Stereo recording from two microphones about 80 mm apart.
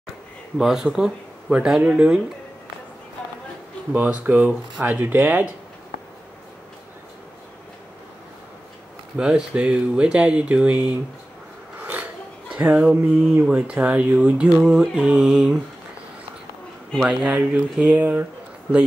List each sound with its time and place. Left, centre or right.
0.6 s speech: centre
3.2 s a sound: centre
3.9 s speech: right
9.1 s speech: centre
11.8 s a sound: right
12.5 s speech: centre
17.0 s speech: centre